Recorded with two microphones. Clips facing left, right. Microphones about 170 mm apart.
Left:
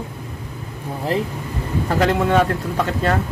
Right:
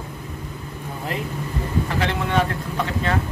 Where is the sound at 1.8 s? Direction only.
45° left (ahead or behind).